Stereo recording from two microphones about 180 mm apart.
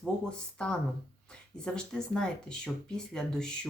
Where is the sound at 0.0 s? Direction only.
5° left (ahead or behind).